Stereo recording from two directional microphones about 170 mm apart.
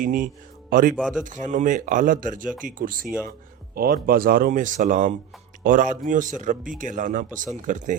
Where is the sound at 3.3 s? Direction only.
60° right (ahead or behind).